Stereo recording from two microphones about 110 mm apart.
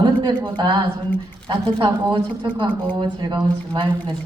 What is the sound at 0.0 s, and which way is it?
Speech, 45° right (ahead or behind).